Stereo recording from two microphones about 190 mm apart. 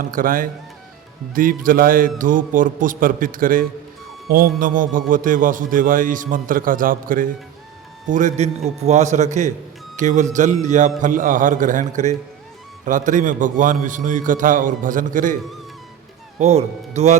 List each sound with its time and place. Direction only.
0.0 s a man's voice: 45° right (ahead or behind)
16.4 s a man's voice: 35° right (ahead or behind)